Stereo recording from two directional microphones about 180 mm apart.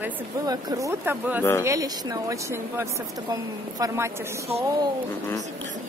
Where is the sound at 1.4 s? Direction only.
15° left (ahead or behind).